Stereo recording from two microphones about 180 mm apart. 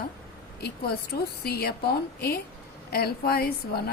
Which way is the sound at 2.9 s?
60° left (ahead or behind).